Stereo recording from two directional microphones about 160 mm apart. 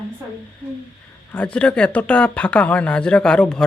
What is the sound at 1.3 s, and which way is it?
Speech, 5° left (ahead or behind).